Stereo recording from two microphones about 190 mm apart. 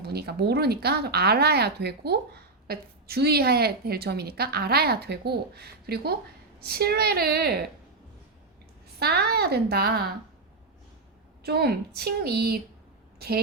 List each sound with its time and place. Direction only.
0.0 s speech: 55° right (ahead or behind)
9.0 s speech: 55° right (ahead or behind)
11.4 s a woman's voice: 55° right (ahead or behind)